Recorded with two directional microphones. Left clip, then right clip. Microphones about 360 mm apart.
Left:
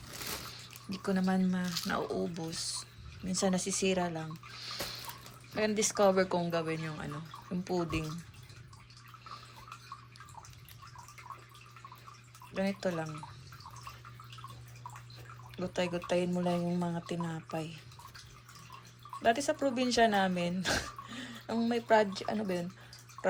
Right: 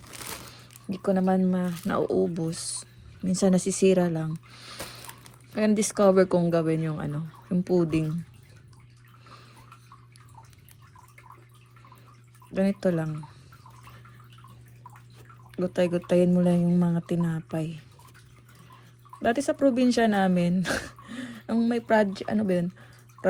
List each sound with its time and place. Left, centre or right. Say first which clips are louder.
0.5 s speech: right 5 dB; centre
2.0 s speech: right 15 dB; right
2.5 s speech: right 3 dB; centre
12.5 s speech: right 8 dB; centre
15.5 s speech: right 9 dB; centre
16.6 s a sound: right 8 dB; right
17.1 s speech: right 7 dB; centre
19.2 s speech: right 6 dB; centre